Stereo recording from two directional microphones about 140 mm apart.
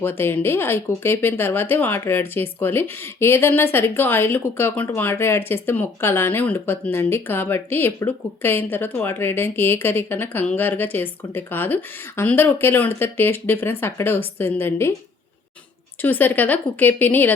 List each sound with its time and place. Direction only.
0.0 s speech: 15° left (ahead or behind)
16.0 s speech: 15° left (ahead or behind)